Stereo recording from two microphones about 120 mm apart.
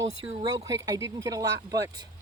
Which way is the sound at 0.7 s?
30° right (ahead or behind).